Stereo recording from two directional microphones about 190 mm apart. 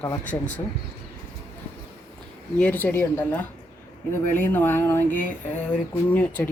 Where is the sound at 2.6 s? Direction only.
10° left (ahead or behind).